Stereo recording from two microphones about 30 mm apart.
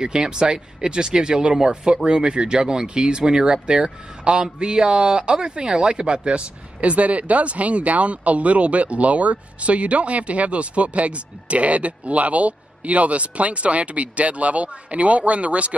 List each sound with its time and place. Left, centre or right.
0.0 s speech: right